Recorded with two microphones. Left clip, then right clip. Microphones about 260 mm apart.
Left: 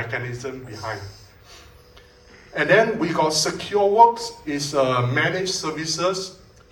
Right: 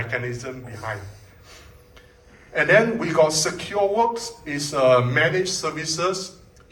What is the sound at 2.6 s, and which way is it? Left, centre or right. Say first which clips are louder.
A man's voice: even; left.